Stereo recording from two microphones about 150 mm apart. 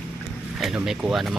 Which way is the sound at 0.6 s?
Centre (ahead or behind).